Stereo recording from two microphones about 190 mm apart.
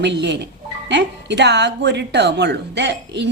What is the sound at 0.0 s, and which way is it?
A woman's voice, 65° right (ahead or behind).